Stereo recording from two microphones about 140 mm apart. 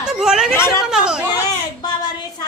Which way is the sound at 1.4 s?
30° left (ahead or behind).